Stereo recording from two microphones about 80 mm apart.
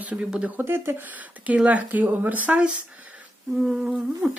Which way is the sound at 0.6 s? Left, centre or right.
Right.